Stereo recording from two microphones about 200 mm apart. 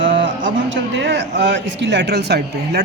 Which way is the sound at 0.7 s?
60° right (ahead or behind).